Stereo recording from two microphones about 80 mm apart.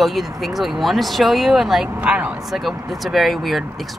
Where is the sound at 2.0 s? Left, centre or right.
Centre.